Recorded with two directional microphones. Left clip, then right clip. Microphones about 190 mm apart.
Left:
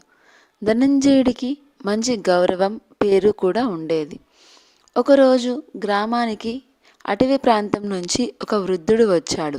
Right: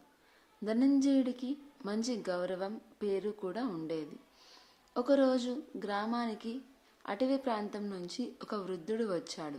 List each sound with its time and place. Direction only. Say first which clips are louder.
0.6 s a woman's voice: left 13 dB; 50° left (ahead or behind)